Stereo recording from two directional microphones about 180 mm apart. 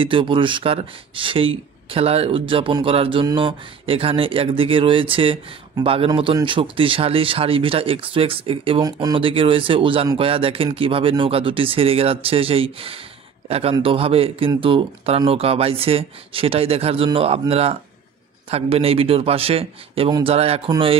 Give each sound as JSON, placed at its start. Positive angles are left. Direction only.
{"t": 0.0, "sound": "speech", "side_deg": -30}